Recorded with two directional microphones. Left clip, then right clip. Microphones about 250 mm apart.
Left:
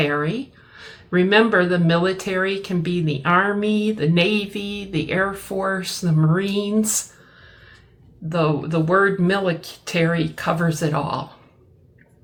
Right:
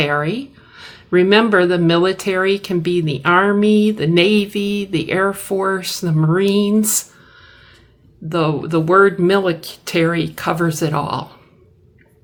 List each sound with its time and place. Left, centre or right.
0.0 s speech: right
8.3 s speech: right